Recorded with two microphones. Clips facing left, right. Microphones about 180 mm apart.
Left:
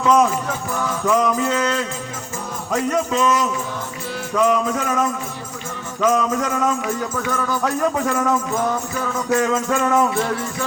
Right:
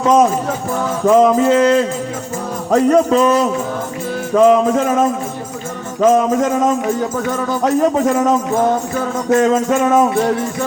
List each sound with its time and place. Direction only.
0.0 s music: 25° right (ahead or behind)
2.6 s jingle bell: 35° right (ahead or behind)
4.4 s music: 25° right (ahead or behind)
8.6 s music: 45° right (ahead or behind)
9.4 s music: 25° right (ahead or behind)